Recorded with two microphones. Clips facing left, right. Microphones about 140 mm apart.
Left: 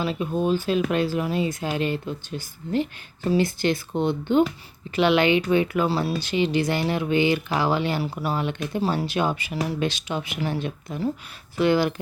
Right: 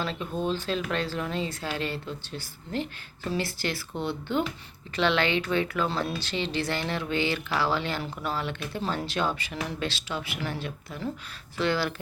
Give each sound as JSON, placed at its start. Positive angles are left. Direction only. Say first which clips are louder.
{"t": 0.0, "sound": "speech", "louder": "left 6 dB", "side_deg": 10}